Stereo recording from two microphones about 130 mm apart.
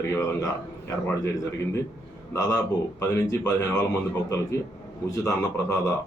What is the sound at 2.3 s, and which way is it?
Speech, 25° left (ahead or behind).